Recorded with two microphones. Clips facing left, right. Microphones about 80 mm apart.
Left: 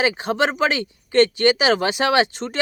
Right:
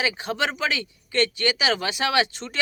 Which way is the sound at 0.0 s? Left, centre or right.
Left.